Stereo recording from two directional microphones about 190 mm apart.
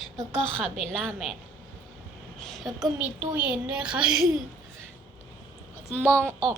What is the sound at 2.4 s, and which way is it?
A woman's voice, centre (ahead or behind).